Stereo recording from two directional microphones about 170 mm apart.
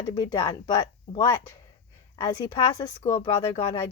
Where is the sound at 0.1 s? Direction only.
25° left (ahead or behind).